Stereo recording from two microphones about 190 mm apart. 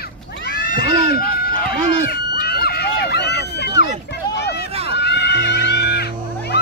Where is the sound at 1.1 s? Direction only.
50° left (ahead or behind).